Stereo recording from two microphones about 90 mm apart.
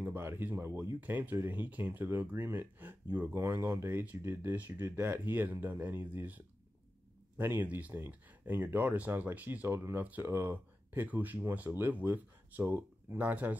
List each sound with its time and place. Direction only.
0.0 s speech: 25° right (ahead or behind)
3.3 s speech: 30° right (ahead or behind)